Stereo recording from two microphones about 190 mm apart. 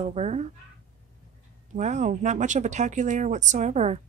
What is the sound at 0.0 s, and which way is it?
Speech, 35° right (ahead or behind).